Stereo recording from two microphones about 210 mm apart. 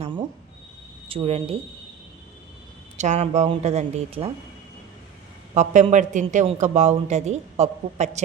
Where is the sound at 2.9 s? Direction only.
35° right (ahead or behind).